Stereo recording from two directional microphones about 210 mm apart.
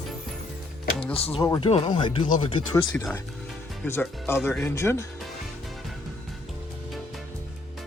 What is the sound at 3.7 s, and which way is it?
Speech, 5° left (ahead or behind).